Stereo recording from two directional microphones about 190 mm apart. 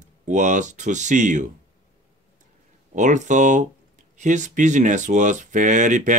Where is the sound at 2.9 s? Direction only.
40° right (ahead or behind).